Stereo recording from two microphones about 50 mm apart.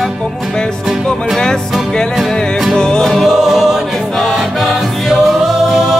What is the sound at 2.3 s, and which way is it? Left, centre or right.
Music, centre.